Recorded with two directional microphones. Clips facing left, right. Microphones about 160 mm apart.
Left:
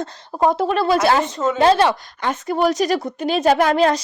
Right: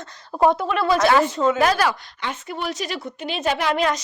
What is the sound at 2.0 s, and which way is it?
A woman's voice, 45° left (ahead or behind).